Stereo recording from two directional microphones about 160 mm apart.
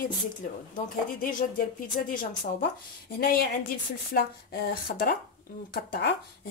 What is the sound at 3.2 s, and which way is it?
A woman's voice, 70° left (ahead or behind).